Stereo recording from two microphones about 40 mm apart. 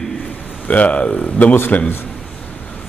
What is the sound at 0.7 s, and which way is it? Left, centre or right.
A man's voice, left.